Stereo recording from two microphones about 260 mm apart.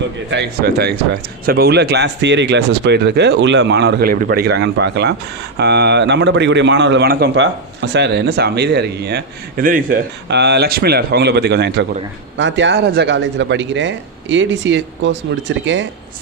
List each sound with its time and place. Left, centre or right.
0.3 s speech: right